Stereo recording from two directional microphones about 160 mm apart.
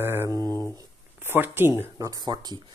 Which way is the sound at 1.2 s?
15° right (ahead or behind).